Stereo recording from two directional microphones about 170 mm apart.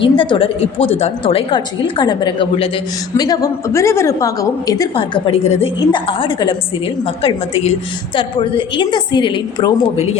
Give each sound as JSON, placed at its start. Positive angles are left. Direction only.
{"t": 0.0, "sound": "a woman's voice", "side_deg": 30}